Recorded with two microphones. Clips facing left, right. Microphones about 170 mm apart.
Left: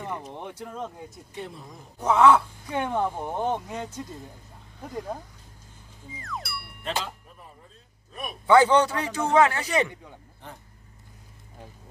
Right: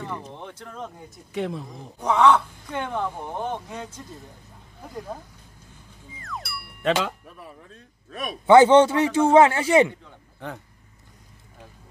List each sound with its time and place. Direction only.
0.0 s speech: 15° left (ahead or behind)
1.3 s speech: 90° right
2.0 s speech: 5° left (ahead or behind)
3.6 s speech: 5° left (ahead or behind)
6.1 s music: centre (ahead or behind)
6.8 s speech: 80° right
8.5 s a man's voice: 25° right (ahead or behind)